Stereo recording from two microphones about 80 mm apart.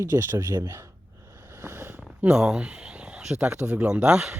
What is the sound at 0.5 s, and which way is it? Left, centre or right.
Speech, right.